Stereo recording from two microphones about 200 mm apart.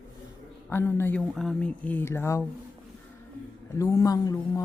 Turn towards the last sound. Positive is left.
turn(degrees=15)  # may be behind; listen again after turning